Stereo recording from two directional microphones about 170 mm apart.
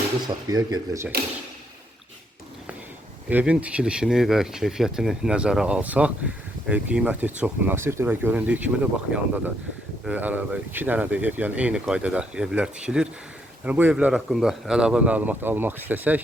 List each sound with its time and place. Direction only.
0.3 s speech: 20° right (ahead or behind)
3.2 s speech: 5° right (ahead or behind)